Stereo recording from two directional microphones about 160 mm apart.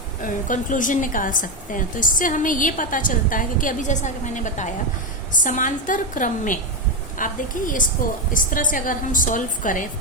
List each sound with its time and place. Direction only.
0.2 s a woman's voice: 55° left (ahead or behind)